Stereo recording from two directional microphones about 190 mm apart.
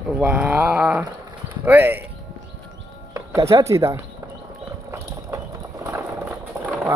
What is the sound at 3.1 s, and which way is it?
Music, 15° right (ahead or behind).